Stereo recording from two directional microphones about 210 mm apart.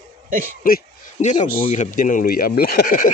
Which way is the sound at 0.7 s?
40° left (ahead or behind).